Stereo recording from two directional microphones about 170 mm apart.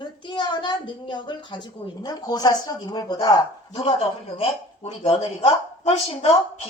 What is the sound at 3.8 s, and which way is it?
Speech, 35° left (ahead or behind).